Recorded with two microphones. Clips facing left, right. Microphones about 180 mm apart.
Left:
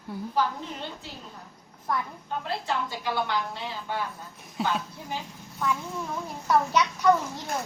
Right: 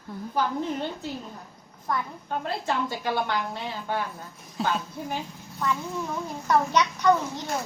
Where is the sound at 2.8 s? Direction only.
50° right (ahead or behind).